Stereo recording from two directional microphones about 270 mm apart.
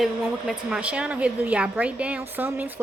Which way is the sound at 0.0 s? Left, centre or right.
Centre.